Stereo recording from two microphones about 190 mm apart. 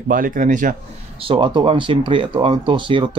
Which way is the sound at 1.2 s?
25° right (ahead or behind).